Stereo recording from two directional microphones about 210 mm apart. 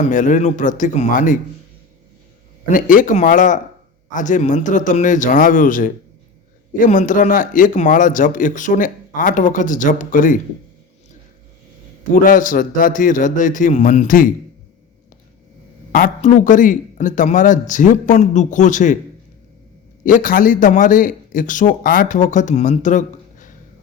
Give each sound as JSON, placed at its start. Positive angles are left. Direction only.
{"t": 0.0, "sound": "speech", "side_deg": 35}
{"t": 2.6, "sound": "speech", "side_deg": 40}
{"t": 12.1, "sound": "speech", "side_deg": 40}
{"t": 15.9, "sound": "speech", "side_deg": 40}
{"t": 20.1, "sound": "speech", "side_deg": 40}